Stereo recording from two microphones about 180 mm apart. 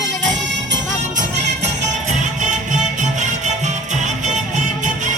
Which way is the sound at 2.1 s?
40° right (ahead or behind).